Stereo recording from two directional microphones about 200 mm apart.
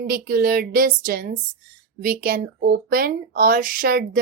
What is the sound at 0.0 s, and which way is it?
Speech, 50° right (ahead or behind).